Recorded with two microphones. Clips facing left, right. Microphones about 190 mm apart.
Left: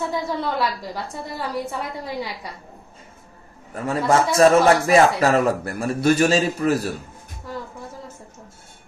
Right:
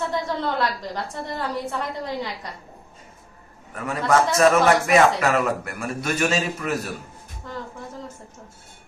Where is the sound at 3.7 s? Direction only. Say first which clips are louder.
Left 2 dB; 30° left (ahead or behind).